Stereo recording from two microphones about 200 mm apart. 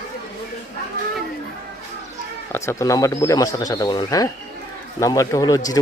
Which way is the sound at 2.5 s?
10° left (ahead or behind).